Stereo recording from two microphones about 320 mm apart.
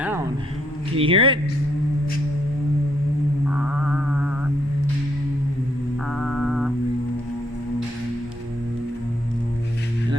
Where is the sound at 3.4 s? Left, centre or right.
Centre.